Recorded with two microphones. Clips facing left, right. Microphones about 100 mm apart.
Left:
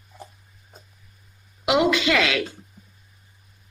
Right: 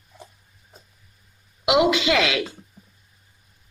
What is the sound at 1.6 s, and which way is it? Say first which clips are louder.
Speech: right 1 dB; 20° right (ahead or behind).